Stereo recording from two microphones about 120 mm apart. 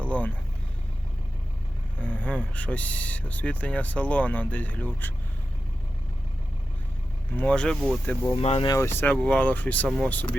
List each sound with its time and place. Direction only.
0.0 s speech: 10° left (ahead or behind)
2.0 s speech: 10° left (ahead or behind)
7.3 s speech: 10° left (ahead or behind)
8.3 s speech: 55° left (ahead or behind)
8.8 s speech: 20° left (ahead or behind)